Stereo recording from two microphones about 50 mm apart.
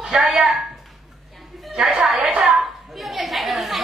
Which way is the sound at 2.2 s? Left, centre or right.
Centre.